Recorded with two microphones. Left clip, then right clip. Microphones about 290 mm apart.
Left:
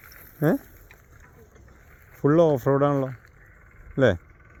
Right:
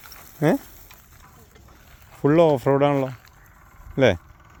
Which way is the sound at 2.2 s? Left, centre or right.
Centre.